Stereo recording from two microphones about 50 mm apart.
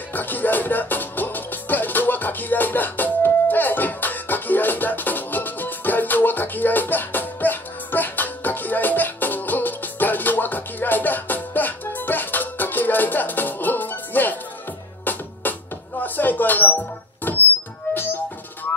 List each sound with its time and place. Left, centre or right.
0.1 s music: left